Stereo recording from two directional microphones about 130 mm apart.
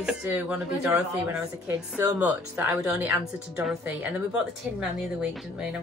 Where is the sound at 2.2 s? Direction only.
15° right (ahead or behind).